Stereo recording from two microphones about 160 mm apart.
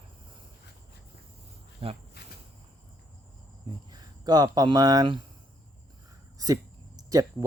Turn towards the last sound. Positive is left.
turn(degrees=-20)  # may be behind; listen again after turning